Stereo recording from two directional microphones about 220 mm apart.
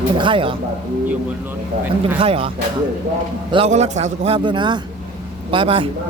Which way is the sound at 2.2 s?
25° right (ahead or behind).